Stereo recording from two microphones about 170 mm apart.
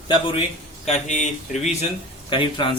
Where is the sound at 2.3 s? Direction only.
30° left (ahead or behind).